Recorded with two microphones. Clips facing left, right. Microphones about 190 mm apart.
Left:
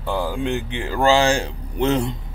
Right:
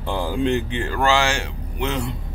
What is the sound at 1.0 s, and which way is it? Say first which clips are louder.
Speech: left 4 dB; 35° left (ahead or behind).